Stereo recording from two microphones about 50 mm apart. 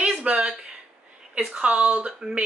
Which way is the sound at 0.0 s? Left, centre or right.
Right.